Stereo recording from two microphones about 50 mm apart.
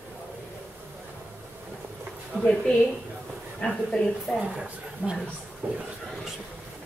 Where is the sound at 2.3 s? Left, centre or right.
Centre.